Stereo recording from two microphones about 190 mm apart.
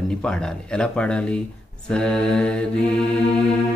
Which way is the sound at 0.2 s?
5° left (ahead or behind).